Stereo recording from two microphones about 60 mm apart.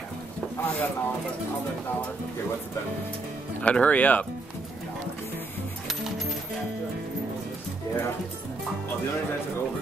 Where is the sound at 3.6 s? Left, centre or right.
Left.